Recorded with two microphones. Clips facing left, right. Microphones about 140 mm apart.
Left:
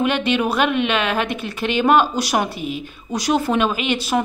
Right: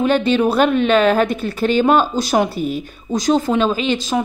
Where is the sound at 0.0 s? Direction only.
35° right (ahead or behind).